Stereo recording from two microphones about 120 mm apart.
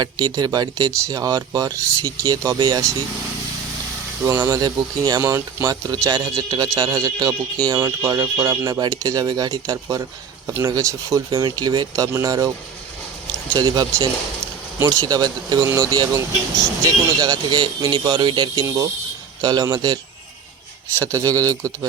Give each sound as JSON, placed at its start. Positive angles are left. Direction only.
{"t": 0.0, "sound": "speech", "side_deg": -35}
{"t": 4.3, "sound": "speech", "side_deg": -25}
{"t": 12.0, "sound": "speech", "side_deg": -25}
{"t": 13.5, "sound": "speech", "side_deg": -35}
{"t": 21.0, "sound": "speech", "side_deg": -25}